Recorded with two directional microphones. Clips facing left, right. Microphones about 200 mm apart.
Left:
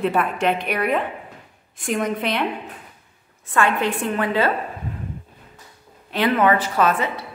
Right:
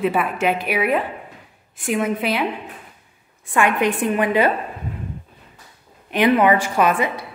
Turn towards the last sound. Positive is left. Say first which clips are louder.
# right 2 dB
turn(degrees=-15)  # may be behind; listen again after turning